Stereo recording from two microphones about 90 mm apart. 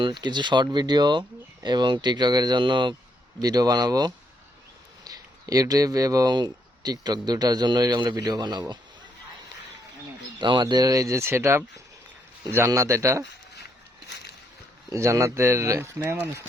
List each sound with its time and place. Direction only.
0.0 s speech: 55° right (ahead or behind)
3.4 s speech: 45° right (ahead or behind)
10.3 s speech: 55° right (ahead or behind); by 13.2 s 35° right (ahead or behind)
14.9 s speech: 35° right (ahead or behind)